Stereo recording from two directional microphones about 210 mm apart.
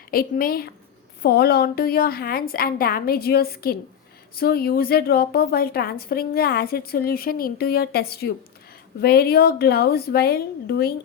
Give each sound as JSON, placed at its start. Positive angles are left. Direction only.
{"t": 0.1, "sound": "a woman's voice", "side_deg": 45}